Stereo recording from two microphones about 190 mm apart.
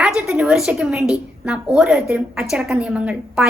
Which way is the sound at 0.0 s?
5° right (ahead or behind).